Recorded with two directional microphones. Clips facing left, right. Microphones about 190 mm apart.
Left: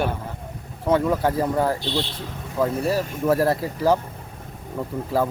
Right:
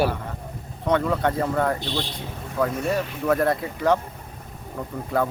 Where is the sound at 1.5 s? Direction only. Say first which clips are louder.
Left 1 dB; 30° left (ahead or behind).